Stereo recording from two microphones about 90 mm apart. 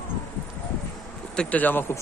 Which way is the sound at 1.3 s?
15° left (ahead or behind).